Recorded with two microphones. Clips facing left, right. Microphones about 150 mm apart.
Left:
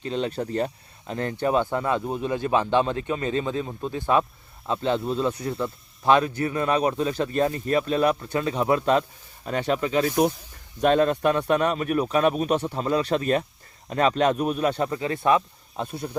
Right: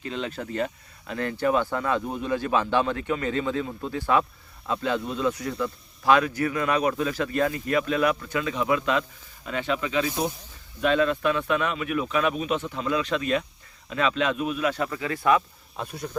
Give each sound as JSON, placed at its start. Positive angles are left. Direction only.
{"t": 0.0, "sound": "speech", "side_deg": 35}